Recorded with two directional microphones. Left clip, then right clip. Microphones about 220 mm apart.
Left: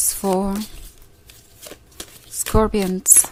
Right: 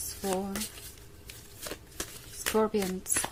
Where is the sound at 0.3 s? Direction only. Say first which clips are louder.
Left 11 dB; 40° left (ahead or behind).